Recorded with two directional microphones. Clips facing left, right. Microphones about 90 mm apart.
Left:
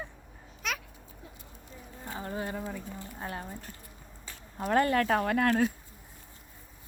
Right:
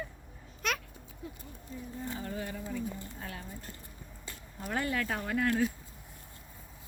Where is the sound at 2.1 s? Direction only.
35° left (ahead or behind).